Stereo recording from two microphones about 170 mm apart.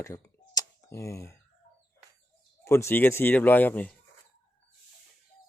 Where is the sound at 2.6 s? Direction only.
15° left (ahead or behind).